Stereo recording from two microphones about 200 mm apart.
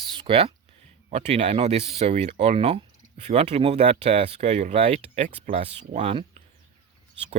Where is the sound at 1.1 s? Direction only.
30° right (ahead or behind).